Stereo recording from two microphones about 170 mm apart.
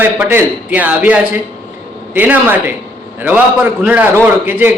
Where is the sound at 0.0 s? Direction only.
10° right (ahead or behind).